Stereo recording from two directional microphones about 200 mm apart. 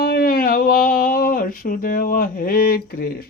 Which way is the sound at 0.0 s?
50° left (ahead or behind).